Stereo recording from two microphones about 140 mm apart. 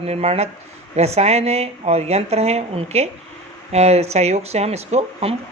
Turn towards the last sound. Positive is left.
turn(degrees=-50)  # may be behind; listen again after turning